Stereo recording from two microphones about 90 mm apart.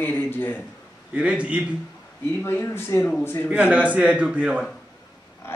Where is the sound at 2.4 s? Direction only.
30° left (ahead or behind).